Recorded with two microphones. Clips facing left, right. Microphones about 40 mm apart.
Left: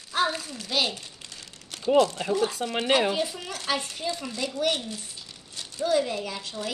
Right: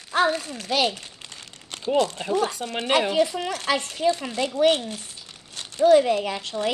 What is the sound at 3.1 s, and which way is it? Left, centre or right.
Speech, right.